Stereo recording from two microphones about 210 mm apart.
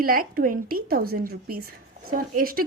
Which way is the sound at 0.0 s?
45° right (ahead or behind).